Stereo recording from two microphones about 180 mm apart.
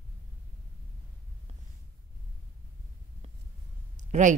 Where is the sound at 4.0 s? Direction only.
45° right (ahead or behind).